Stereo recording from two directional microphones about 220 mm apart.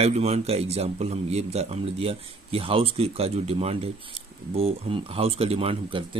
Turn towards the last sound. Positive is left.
turn(degrees=-25)  # may be behind; listen again after turning